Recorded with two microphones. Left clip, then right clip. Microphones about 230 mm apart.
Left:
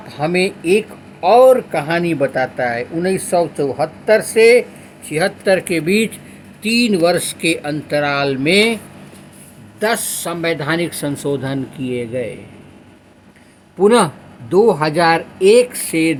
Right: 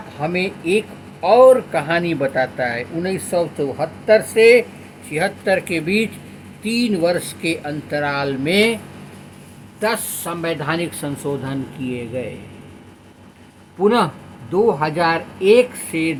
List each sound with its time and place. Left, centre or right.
0.2 s speech: left
9.8 s speech: left
13.7 s speech: left